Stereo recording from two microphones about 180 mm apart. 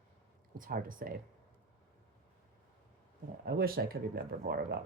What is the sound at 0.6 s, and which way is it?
Speech, 50° right (ahead or behind).